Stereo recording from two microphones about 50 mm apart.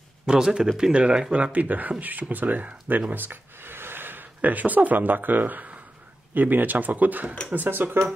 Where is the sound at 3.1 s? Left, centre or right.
Right.